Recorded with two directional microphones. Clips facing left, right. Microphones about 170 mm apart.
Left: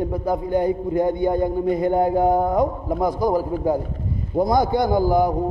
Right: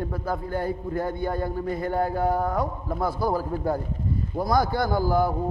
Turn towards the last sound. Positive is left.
turn(degrees=15)  # may be behind; listen again after turning